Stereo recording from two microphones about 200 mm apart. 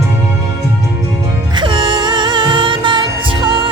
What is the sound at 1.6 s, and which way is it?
Music, 25° right (ahead or behind).